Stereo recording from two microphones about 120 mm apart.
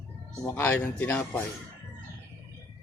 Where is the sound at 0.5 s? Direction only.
15° left (ahead or behind).